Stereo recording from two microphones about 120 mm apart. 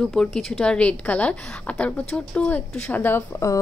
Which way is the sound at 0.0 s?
5° left (ahead or behind).